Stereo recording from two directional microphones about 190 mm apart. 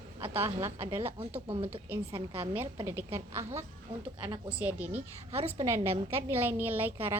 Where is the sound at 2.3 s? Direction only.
10° right (ahead or behind).